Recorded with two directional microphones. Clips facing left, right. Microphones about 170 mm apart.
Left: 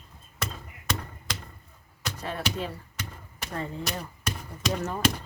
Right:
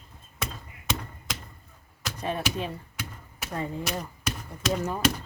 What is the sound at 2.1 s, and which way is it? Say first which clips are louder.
Speech: right 5 dB; 20° right (ahead or behind).